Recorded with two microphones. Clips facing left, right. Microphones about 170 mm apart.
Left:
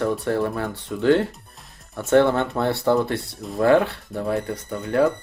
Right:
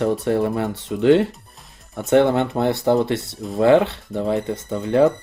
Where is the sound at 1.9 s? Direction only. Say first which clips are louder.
Right 1 dB; 20° right (ahead or behind).